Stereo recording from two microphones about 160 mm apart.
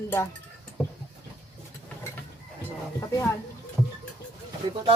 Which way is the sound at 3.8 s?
10° right (ahead or behind).